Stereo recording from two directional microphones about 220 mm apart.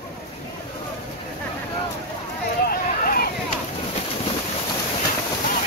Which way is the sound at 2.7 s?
45° left (ahead or behind).